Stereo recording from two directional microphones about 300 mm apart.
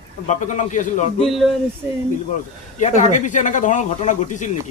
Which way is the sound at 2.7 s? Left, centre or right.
Left.